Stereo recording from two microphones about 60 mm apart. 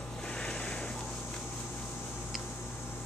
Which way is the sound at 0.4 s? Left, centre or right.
Centre.